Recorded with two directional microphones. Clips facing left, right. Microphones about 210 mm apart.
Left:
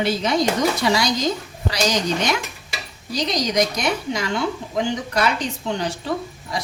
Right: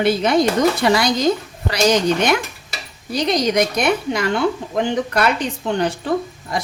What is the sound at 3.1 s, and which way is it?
Speech, 55° right (ahead or behind).